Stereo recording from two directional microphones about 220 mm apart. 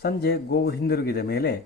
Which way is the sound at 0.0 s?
45° left (ahead or behind).